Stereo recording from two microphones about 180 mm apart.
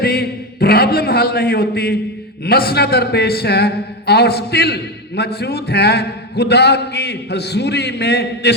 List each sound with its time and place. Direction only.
0.0 s a man's voice: 60° left (ahead or behind)